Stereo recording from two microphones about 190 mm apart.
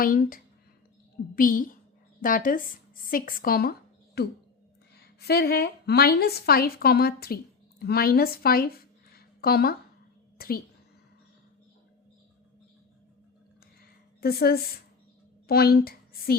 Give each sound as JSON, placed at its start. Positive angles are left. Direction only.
{"t": 0.0, "sound": "a woman's voice", "side_deg": 50}
{"t": 10.3, "sound": "a sound", "side_deg": 50}
{"t": 14.2, "sound": "a woman's voice", "side_deg": 55}